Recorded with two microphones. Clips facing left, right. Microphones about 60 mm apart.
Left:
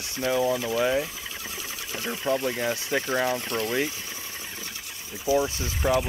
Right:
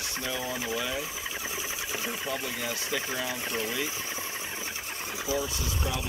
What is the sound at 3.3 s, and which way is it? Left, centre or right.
Speech, centre.